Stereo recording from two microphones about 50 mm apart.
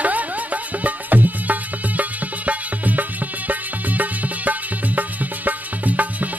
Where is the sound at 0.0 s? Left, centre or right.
Right.